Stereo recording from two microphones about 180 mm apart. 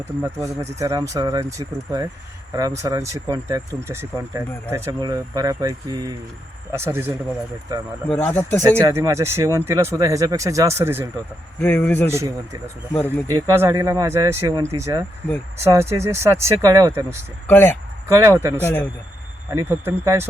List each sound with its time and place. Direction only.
0.2 s speech: 15° right (ahead or behind)
8.1 s speech: 10° left (ahead or behind)
8.8 s speech: 15° right (ahead or behind)
11.6 s speech: 10° left (ahead or behind)
13.2 s speech: 15° right (ahead or behind)
17.4 s speech: 10° left (ahead or behind)
18.1 s speech: 15° right (ahead or behind)
18.6 s speech: 10° left (ahead or behind)
19.5 s speech: 15° right (ahead or behind)